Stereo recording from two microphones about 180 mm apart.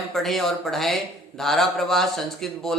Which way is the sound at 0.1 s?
Centre (ahead or behind).